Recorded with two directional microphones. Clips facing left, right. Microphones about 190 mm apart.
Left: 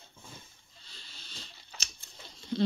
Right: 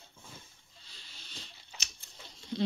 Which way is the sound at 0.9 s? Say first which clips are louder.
Even; 15° right (ahead or behind).